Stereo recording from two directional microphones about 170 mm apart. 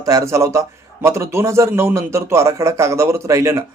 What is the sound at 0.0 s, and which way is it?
A man's voice, 20° right (ahead or behind).